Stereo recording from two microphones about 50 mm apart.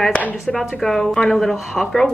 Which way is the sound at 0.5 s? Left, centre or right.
Centre.